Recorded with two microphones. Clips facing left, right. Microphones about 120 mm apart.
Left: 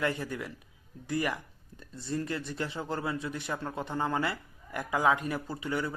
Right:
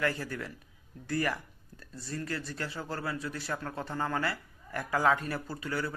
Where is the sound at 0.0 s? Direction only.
20° left (ahead or behind).